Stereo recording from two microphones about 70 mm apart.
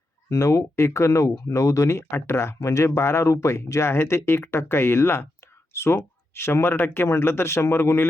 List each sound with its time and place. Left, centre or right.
0.3 s speech: left
2.6 s speech: left